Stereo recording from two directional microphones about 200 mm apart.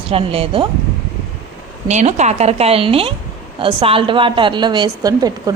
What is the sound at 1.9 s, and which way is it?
A woman's voice, 35° right (ahead or behind).